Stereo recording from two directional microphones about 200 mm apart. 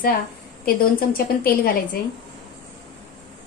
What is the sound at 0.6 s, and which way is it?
Speech, 45° left (ahead or behind).